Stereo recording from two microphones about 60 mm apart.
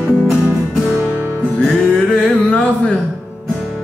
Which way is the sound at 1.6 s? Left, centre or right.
Centre.